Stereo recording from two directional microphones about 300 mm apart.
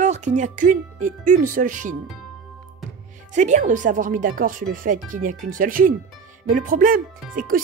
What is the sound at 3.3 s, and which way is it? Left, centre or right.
Speech, right.